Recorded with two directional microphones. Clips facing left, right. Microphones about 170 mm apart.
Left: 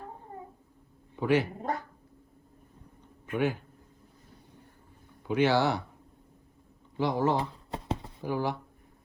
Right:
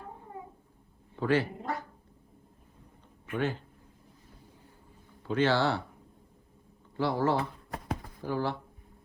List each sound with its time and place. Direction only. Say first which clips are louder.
1.1 s speech: left 1 dB; 15° left (ahead or behind)
3.3 s speech: left 3 dB; 10° left (ahead or behind)
5.3 s speech: left 1 dB; 15° left (ahead or behind)
6.9 s shuffling cards: left 1 dB; 15° left (ahead or behind)